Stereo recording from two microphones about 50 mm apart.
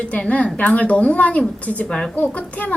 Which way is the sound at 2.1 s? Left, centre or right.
Left.